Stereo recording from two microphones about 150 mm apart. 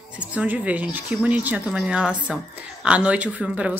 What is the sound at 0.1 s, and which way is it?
Speech, 10° right (ahead or behind).